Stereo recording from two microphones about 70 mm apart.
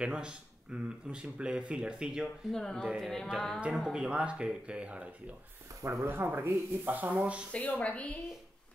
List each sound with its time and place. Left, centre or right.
0.0 s speech: centre
2.5 s speech: centre
3.0 s music: centre
3.3 s speech: centre
3.9 s speech: centre
5.8 s speech: right
6.0 s speech: right
7.5 s a woman's voice: centre